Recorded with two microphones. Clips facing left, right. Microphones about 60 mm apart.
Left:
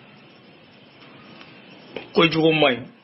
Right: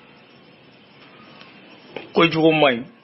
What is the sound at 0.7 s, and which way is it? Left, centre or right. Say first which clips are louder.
Printer: even; centre.